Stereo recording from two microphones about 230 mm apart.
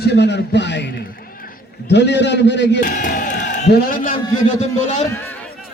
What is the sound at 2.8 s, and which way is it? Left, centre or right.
Crowd, left.